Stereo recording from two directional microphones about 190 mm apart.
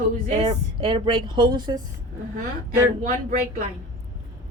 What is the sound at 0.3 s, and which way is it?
A woman's voice, 25° right (ahead or behind).